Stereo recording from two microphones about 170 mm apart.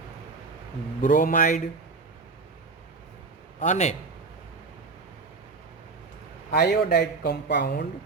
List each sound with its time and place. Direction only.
1.0 s speech: 50° left (ahead or behind)
3.6 s speech: 45° left (ahead or behind)
6.5 s a man's voice: 65° left (ahead or behind)